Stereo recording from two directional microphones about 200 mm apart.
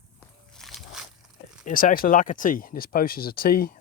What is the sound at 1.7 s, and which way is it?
Speech, 45° left (ahead or behind).